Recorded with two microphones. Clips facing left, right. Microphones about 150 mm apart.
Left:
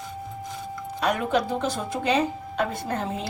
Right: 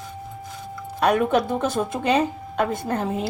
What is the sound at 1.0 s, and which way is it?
Speech, 55° right (ahead or behind).